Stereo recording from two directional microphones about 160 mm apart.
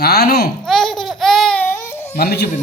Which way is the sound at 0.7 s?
Centre (ahead or behind).